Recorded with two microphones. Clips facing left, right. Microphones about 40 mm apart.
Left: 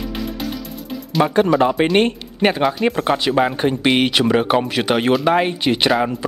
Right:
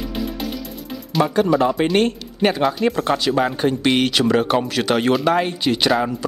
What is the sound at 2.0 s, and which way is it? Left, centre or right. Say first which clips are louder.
Speech: left 2 dB; left.